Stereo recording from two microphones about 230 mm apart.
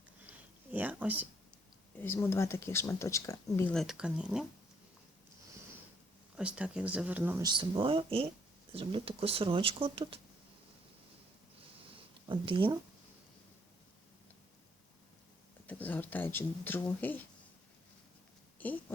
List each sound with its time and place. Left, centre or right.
0.3 s a sound: centre
2.0 s speech: centre
6.3 s speech: centre; by 10.2 s right
12.3 s speech: right
15.6 s speech: centre
18.6 s a sound: centre